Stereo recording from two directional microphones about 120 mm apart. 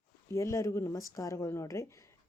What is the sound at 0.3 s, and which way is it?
Speech, 25° left (ahead or behind).